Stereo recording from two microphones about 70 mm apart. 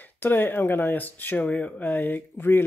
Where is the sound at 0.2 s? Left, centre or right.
Left.